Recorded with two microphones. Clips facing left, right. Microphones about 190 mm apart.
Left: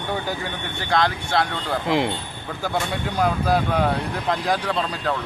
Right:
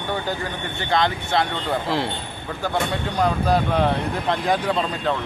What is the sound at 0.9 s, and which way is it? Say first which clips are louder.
Speech: even; centre (ahead or behind).